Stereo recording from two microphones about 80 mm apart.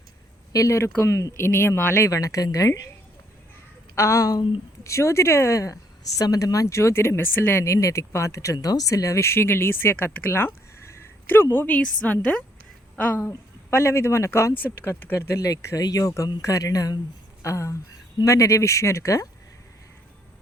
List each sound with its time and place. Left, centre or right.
0.5 s a woman's voice: left
2.0 s speech: left
3.9 s a woman's voice: left
7.6 s a woman's voice: left
8.5 s a woman's voice: left
14.6 s a woman's voice: left
15.1 s a woman's voice: left